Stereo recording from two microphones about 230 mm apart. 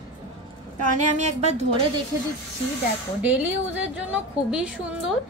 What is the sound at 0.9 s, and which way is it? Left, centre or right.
Speech, right.